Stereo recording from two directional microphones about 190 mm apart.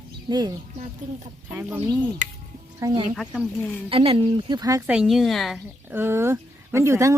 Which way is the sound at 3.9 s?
30° right (ahead or behind).